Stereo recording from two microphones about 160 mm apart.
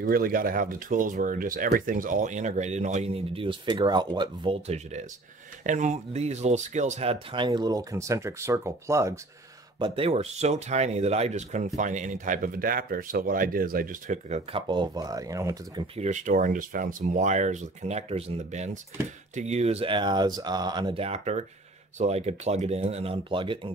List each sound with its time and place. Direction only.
0.0 s speech: 65° right (ahead or behind); by 4.6 s 25° right (ahead or behind)
4.6 s speech: 45° right (ahead or behind); by 9.2 s 20° right (ahead or behind)
9.8 s speech: 35° right (ahead or behind); by 14.4 s 50° right (ahead or behind)
14.5 s speech: 30° right (ahead or behind)
16.0 s speech: 50° right (ahead or behind); by 23.7 s 30° right (ahead or behind)